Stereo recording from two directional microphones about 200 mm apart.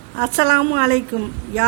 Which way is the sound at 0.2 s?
35° right (ahead or behind).